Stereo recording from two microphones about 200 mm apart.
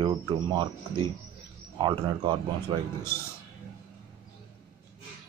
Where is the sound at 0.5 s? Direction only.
25° right (ahead or behind).